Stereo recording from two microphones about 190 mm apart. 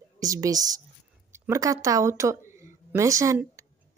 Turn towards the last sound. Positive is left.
turn(degrees=-15)  # may be behind; listen again after turning